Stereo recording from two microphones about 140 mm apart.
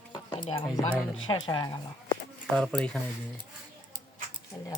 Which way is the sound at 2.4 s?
5° left (ahead or behind).